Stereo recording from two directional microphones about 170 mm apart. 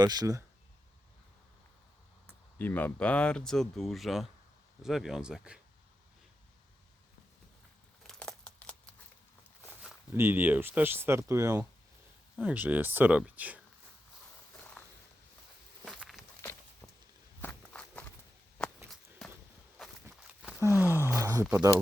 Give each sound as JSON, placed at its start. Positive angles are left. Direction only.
{"t": 0.0, "sound": "speech", "side_deg": -25}
{"t": 2.2, "sound": "speech", "side_deg": 10}
{"t": 8.0, "sound": "crumpling", "side_deg": 5}
{"t": 9.8, "sound": "speech", "side_deg": -15}
{"t": 14.8, "sound": "walk", "side_deg": 10}
{"t": 15.8, "sound": "walk", "side_deg": 0}
{"t": 16.4, "sound": "walk", "side_deg": 10}
{"t": 19.2, "sound": "walk", "side_deg": 0}
{"t": 20.1, "sound": "a sound", "side_deg": -5}
{"t": 21.5, "sound": "speech", "side_deg": -20}